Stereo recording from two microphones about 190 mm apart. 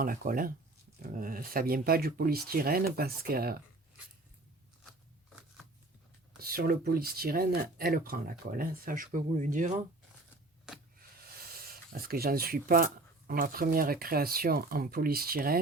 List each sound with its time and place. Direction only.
0.0 s speech: 50° right (ahead or behind)
6.4 s speech: 50° right (ahead or behind)
11.3 s speech: 50° right (ahead or behind)